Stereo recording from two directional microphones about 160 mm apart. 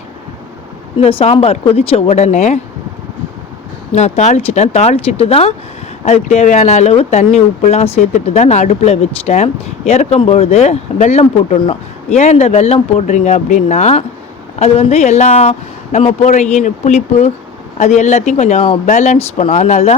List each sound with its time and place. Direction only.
0.9 s speech: 35° left (ahead or behind)
3.9 s speech: 45° left (ahead or behind)